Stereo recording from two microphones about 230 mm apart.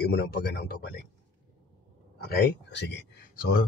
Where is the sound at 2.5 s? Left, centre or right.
Left.